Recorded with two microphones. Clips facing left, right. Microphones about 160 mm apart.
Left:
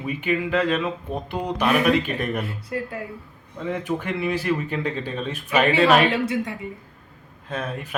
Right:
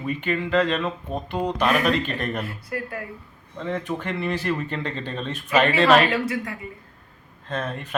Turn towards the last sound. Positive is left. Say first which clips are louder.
# even
turn(degrees=5)  # may be behind; listen again after turning